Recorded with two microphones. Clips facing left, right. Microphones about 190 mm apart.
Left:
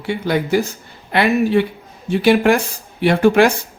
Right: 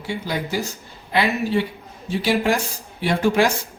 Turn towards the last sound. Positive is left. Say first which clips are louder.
# left 6 dB
turn(degrees=65)  # may be behind; listen again after turning